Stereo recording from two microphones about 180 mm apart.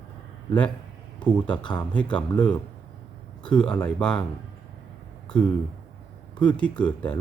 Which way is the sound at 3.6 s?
5° left (ahead or behind).